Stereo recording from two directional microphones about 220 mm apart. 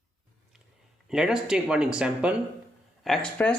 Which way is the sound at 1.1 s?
5° right (ahead or behind).